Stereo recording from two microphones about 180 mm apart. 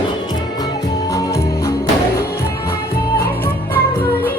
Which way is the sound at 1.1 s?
15° left (ahead or behind).